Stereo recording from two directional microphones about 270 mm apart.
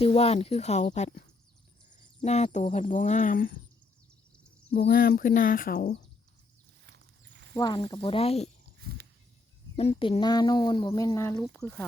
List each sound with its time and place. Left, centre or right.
0.0 s speech: left
2.2 s speech: left
4.9 s speech: left
7.5 s speech: centre
9.7 s speech: left; by 11.9 s centre